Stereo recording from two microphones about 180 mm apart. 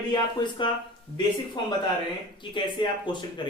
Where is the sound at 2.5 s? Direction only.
25° left (ahead or behind).